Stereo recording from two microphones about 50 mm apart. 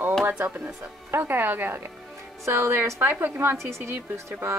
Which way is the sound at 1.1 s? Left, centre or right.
Right.